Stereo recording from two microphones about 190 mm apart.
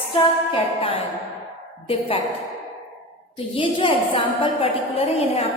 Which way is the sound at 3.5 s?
25° left (ahead or behind).